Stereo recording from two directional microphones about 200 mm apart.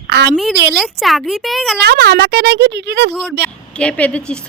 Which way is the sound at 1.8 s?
55° right (ahead or behind).